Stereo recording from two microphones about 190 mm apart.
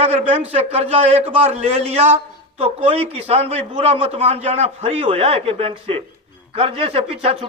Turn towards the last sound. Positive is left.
turn(degrees=-30)  # may be behind; listen again after turning